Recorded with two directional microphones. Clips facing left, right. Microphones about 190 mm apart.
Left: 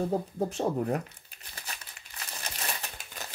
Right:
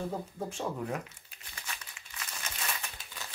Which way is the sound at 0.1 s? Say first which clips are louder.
Left 7 dB; 40° left (ahead or behind).